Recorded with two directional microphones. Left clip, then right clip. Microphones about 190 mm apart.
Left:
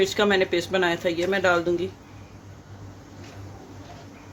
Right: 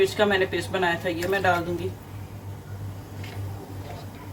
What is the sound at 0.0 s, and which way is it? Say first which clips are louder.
Speech: even; 50° left (ahead or behind).